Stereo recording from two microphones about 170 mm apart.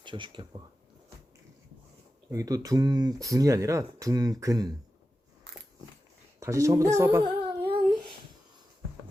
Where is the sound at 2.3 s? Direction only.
20° right (ahead or behind).